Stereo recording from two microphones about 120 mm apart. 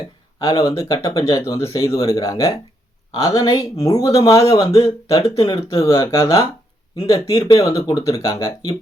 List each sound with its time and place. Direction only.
0.3 s speech: 30° left (ahead or behind)